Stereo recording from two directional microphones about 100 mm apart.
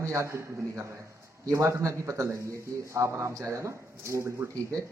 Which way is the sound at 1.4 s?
30° right (ahead or behind).